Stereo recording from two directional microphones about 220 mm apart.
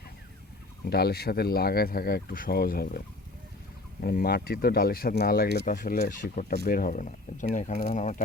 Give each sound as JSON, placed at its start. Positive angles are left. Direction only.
{"t": 0.9, "sound": "speech", "side_deg": 45}
{"t": 4.0, "sound": "speech", "side_deg": 40}